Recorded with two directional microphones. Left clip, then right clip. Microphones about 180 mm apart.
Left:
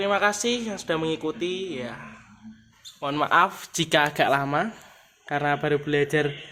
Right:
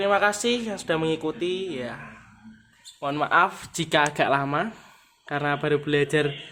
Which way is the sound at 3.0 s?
15° left (ahead or behind).